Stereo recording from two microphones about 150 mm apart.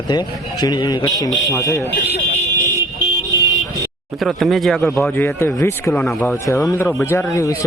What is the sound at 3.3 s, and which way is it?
Vehicle, 20° right (ahead or behind).